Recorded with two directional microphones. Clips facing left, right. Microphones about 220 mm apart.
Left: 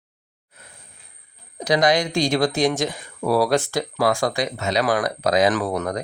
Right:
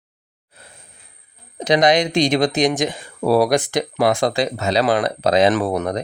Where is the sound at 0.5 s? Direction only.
35° right (ahead or behind).